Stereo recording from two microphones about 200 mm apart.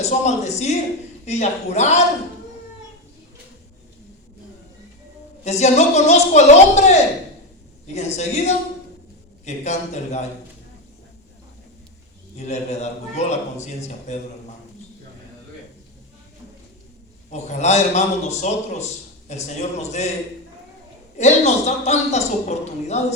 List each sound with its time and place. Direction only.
0.0 s a man's voice: 35° left (ahead or behind)
5.4 s a man's voice: 35° left (ahead or behind)
12.4 s a man's voice: 35° left (ahead or behind)
17.3 s a man's voice: 35° left (ahead or behind)
21.2 s a man's voice: 35° left (ahead or behind)